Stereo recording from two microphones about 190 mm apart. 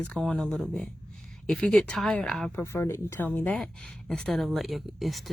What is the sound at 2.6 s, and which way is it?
Speech, 15° left (ahead or behind).